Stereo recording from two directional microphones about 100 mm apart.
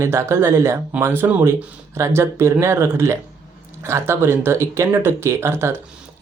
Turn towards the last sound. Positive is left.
turn(degrees=-25)  # may be behind; listen again after turning